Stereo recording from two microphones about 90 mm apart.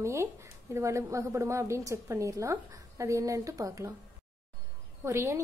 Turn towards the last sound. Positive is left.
turn(degrees=-30)  # may be behind; listen again after turning